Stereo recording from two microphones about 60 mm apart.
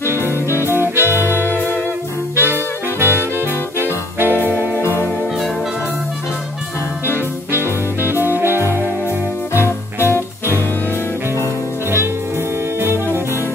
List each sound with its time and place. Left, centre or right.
0.7 s music: right
1.3 s music: left
2.3 s saxophone: right
3.8 s music: right
8.0 s music: right
9.5 s music: left
12.8 s music: right